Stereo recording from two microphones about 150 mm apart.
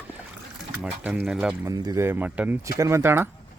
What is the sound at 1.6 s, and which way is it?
Speech, 25° right (ahead or behind).